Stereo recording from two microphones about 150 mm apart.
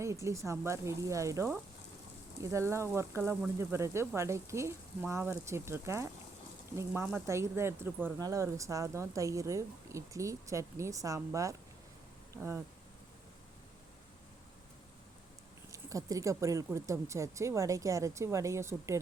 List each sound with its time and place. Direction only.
0.0 s speech: 20° right (ahead or behind)
15.7 s speech: 20° right (ahead or behind)